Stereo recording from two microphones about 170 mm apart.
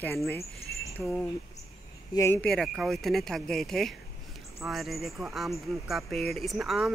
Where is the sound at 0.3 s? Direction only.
15° left (ahead or behind).